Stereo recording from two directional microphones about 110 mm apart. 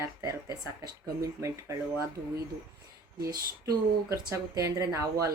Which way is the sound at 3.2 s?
35° right (ahead or behind).